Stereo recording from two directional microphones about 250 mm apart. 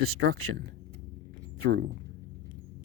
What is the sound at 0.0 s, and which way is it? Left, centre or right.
Speech, right.